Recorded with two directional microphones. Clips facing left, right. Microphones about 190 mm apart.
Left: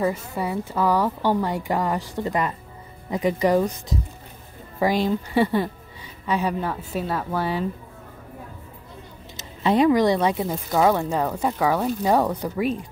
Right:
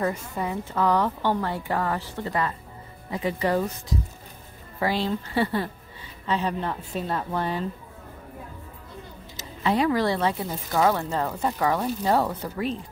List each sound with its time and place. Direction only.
0.0 s speech: 10° left (ahead or behind)
4.7 s speech: 15° left (ahead or behind)
9.4 s speech: 20° left (ahead or behind)